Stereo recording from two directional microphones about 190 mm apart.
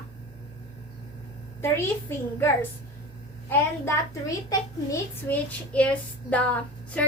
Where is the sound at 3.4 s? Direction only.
10° left (ahead or behind).